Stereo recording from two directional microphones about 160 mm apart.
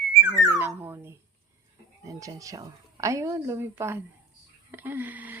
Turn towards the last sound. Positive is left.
turn(degrees=-10)  # may be behind; listen again after turning